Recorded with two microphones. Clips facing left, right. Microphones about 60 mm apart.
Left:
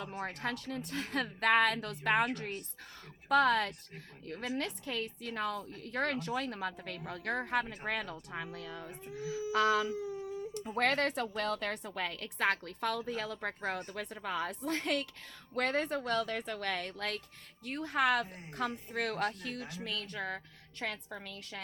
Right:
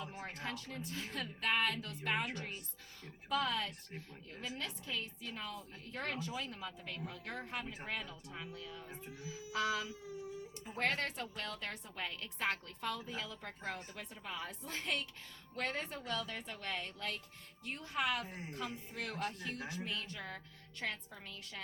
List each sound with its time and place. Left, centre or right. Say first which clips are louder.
0.0 s a woman's voice: left 6 dB; left
18.3 s a woman's voice: right 2 dB; centre
18.5 s a woman's voice: left 9 dB; left